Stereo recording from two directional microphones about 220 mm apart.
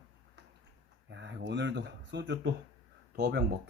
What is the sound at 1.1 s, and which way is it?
Speech, 55° right (ahead or behind).